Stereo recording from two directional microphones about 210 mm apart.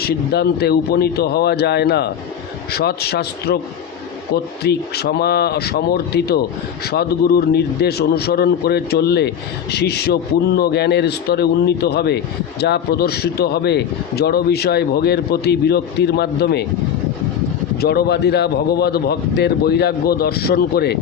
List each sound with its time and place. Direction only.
0.0 s a man's voice: 50° left (ahead or behind)
4.6 s a man's voice: 50° left (ahead or behind)
17.7 s a man's voice: 50° left (ahead or behind)